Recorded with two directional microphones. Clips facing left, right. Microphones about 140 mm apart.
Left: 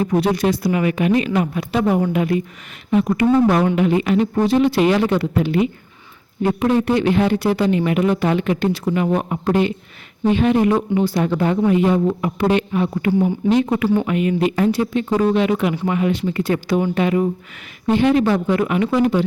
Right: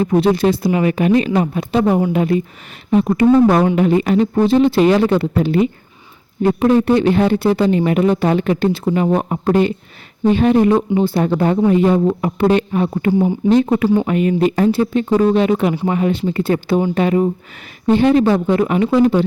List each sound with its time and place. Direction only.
0.0 s speech: 25° right (ahead or behind)
13.8 s speech: 15° right (ahead or behind)
14.1 s speech: 35° right (ahead or behind)